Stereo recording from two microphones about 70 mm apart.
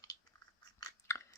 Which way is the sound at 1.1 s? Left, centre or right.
Left.